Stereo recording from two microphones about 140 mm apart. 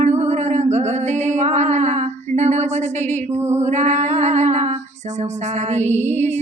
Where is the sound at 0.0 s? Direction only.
50° right (ahead or behind).